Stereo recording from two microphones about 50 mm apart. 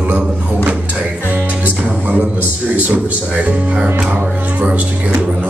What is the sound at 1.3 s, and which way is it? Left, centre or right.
Music, right.